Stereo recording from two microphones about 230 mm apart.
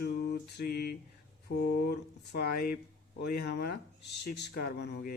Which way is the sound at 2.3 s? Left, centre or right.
Left.